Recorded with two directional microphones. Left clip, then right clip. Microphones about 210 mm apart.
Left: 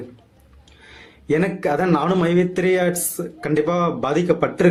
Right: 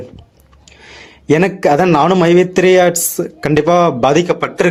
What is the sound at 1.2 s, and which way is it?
A man's voice, 45° right (ahead or behind).